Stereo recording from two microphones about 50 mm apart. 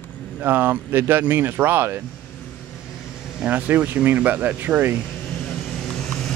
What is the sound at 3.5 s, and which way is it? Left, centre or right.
Speech, right.